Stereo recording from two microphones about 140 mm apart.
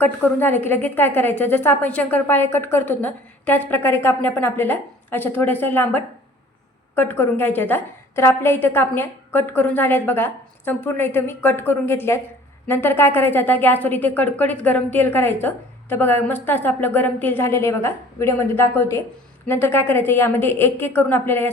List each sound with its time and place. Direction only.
0.0 s a woman's voice: 15° left (ahead or behind)